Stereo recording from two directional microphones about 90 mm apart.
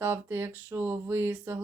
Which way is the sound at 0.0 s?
25° right (ahead or behind).